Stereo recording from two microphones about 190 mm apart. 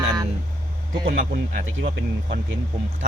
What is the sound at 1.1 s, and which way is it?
Speech, 55° right (ahead or behind).